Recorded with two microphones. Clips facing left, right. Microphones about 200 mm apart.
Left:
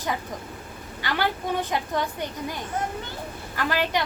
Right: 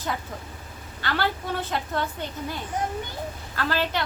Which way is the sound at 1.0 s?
15° left (ahead or behind).